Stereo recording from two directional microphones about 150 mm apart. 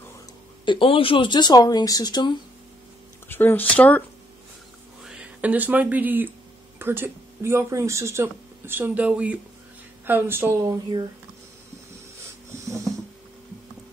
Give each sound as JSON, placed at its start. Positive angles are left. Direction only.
{"t": 0.7, "sound": "speech", "side_deg": 35}
{"t": 3.3, "sound": "speech", "side_deg": 15}
{"t": 5.0, "sound": "speech", "side_deg": -5}
{"t": 12.2, "sound": "a sound", "side_deg": -20}